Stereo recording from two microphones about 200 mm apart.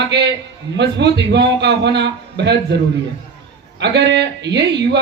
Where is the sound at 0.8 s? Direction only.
60° right (ahead or behind).